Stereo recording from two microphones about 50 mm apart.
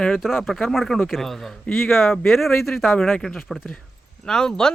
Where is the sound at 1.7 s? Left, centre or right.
Left.